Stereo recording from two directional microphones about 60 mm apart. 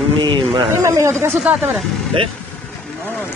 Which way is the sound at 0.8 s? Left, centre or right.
Right.